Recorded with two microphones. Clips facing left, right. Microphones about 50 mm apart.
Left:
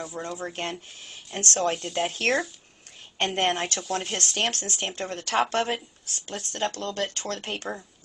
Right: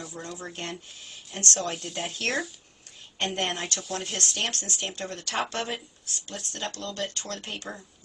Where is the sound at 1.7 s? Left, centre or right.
Centre.